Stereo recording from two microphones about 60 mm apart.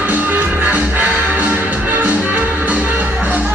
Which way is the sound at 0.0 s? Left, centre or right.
Right.